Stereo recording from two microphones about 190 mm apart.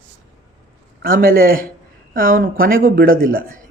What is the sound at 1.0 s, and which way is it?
Speech, 50° right (ahead or behind).